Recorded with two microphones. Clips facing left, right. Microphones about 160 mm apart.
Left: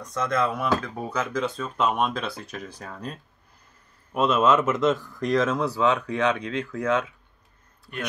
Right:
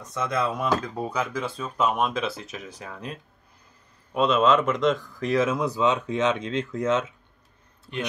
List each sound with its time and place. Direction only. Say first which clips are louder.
0.0 s speech: left 2 dB; 5° right (ahead or behind); by 7.1 s 25° right (ahead or behind)